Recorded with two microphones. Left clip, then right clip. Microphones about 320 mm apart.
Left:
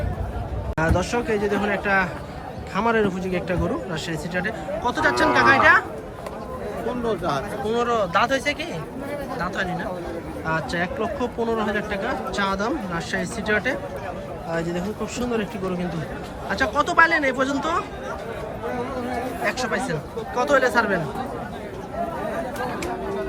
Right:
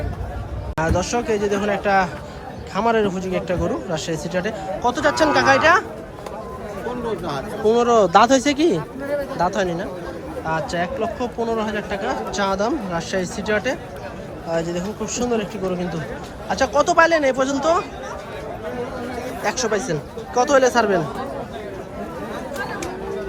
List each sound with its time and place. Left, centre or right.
0.8 s speech: centre
7.0 s speech: centre
19.5 s speech: centre